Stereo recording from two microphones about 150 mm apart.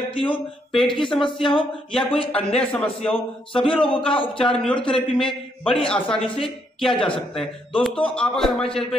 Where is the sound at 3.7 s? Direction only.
35° left (ahead or behind).